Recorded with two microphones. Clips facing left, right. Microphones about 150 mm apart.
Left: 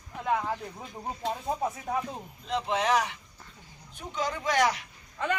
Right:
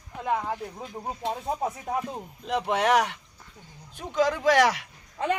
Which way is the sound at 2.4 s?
65° right (ahead or behind).